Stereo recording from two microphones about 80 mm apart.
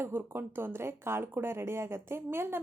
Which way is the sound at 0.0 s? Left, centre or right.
Right.